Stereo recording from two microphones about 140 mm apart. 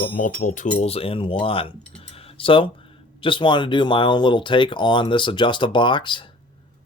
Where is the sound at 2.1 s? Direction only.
40° left (ahead or behind).